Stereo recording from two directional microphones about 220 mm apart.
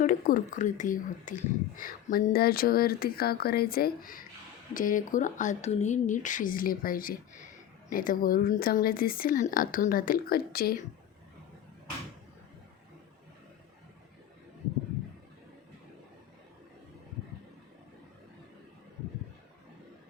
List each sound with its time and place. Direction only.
0.0 s a woman's voice: 40° left (ahead or behind)